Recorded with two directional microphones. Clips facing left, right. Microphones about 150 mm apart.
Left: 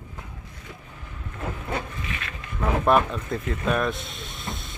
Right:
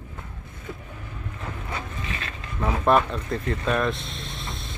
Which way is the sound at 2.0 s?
30° right (ahead or behind).